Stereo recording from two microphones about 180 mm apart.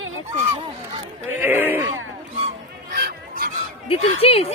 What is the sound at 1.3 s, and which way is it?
Speech, 10° right (ahead or behind).